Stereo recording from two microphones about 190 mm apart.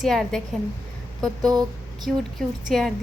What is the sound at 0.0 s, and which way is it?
A woman's voice, centre (ahead or behind).